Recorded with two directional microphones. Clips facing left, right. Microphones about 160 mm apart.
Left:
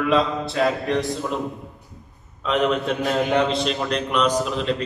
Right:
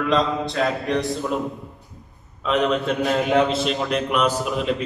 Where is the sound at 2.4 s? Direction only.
Centre (ahead or behind).